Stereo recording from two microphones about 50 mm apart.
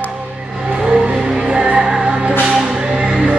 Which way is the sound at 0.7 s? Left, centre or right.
Centre.